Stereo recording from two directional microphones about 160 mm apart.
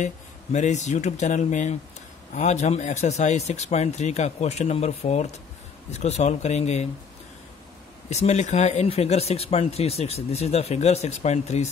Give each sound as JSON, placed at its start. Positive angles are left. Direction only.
{"t": 0.0, "sound": "speech", "side_deg": 45}
{"t": 8.1, "sound": "speech", "side_deg": 45}